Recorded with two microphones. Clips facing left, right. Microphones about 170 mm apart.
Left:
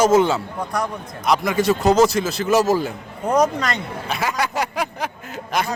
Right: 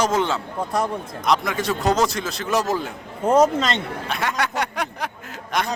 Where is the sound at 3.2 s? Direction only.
25° right (ahead or behind).